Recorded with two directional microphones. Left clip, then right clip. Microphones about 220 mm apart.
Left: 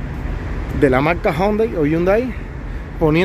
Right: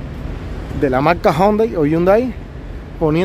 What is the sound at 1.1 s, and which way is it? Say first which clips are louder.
Speech: right 4 dB; 15° right (ahead or behind).